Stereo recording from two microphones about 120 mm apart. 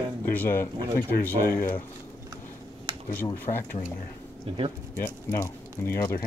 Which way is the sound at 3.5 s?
65° left (ahead or behind).